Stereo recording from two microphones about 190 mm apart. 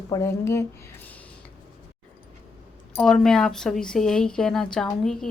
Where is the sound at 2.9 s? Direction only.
5° left (ahead or behind).